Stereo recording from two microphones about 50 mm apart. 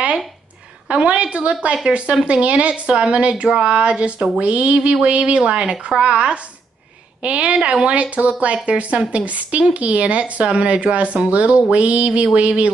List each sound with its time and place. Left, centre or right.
0.8 s a woman's voice: right